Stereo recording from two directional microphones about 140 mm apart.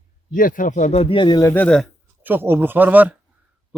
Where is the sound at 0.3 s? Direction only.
75° left (ahead or behind); by 1.5 s 25° left (ahead or behind).